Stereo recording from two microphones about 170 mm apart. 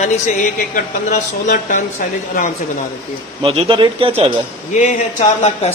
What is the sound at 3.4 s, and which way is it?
Speech, 30° right (ahead or behind).